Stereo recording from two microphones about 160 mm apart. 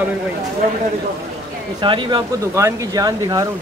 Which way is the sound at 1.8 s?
30° right (ahead or behind).